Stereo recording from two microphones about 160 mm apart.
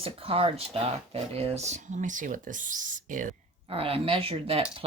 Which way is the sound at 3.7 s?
35° right (ahead or behind).